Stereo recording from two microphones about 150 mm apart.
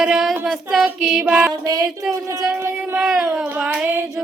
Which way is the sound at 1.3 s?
15° right (ahead or behind).